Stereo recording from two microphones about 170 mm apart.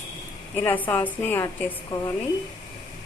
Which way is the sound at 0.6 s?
10° left (ahead or behind).